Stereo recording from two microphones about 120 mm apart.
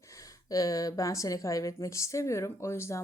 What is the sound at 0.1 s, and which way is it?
A woman's voice, 30° left (ahead or behind).